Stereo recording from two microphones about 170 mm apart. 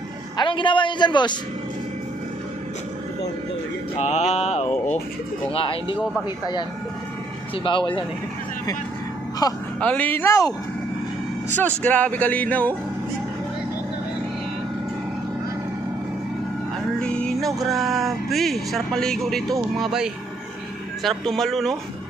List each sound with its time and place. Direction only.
0.4 s a man's voice: 30° left (ahead or behind)
4.0 s mantra: 45° left (ahead or behind)
5.5 s speech: 35° left (ahead or behind)
7.5 s a man's voice: 30° left (ahead or behind)
9.4 s a man's voice: 25° left (ahead or behind)
9.8 s speech: 10° left (ahead or behind)
11.5 s speech: 10° left (ahead or behind)
17.0 s music: 5° left (ahead or behind)
17.6 s speech: centre (ahead or behind)